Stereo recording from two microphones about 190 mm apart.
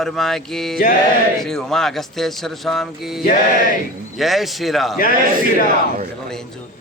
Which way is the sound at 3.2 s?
45° left (ahead or behind).